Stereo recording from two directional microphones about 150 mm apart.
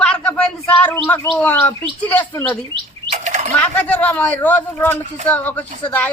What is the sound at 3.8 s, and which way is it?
A man's voice, 10° left (ahead or behind).